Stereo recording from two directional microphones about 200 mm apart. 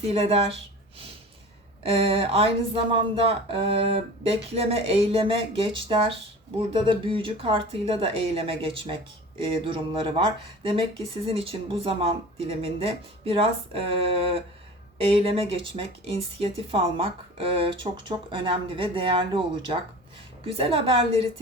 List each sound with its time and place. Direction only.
0.1 s speech: 30° right (ahead or behind)
1.8 s speech: 30° right (ahead or behind)